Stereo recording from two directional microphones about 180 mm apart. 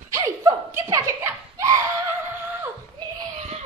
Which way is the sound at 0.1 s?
20° right (ahead or behind).